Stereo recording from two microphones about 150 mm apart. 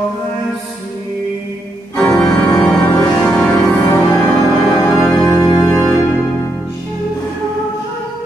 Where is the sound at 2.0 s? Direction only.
10° left (ahead or behind).